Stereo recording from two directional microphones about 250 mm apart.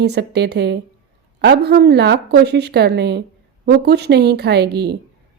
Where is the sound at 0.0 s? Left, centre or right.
Right.